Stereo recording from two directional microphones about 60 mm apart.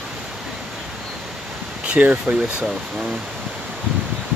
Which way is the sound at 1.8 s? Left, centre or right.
Right.